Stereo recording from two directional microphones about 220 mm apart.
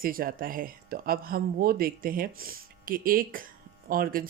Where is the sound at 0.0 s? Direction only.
40° right (ahead or behind).